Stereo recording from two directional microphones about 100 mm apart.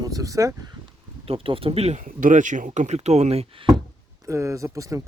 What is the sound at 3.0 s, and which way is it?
Speech, 90° right.